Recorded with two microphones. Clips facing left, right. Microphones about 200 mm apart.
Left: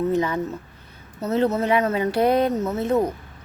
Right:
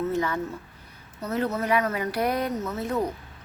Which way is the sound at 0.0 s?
15° left (ahead or behind).